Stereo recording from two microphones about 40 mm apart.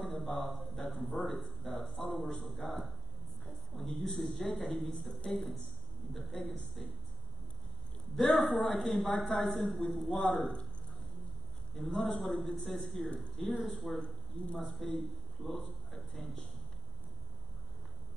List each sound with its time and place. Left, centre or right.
0.0 s a man's voice: centre
3.4 s a sound: centre
4.2 s a man's voice: centre
8.2 s a man's voice: centre
9.0 s a man's voice: centre
11.7 s a man's voice: centre
13.0 s speech: left
13.7 s a man's voice: centre
13.9 s speech: left
14.6 s a man's voice: centre